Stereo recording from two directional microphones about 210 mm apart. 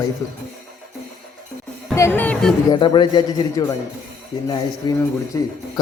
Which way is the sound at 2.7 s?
20° left (ahead or behind).